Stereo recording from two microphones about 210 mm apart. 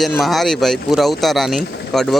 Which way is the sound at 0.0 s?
Centre (ahead or behind).